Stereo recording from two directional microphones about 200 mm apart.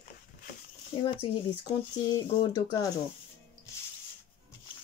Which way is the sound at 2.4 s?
20° left (ahead or behind).